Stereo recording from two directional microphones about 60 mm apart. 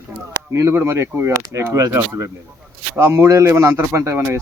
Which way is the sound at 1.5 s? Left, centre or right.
Right.